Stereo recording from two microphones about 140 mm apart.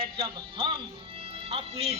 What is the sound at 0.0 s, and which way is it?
Speech, 40° right (ahead or behind).